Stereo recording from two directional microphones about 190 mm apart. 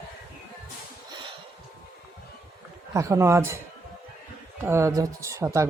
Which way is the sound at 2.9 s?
15° right (ahead or behind).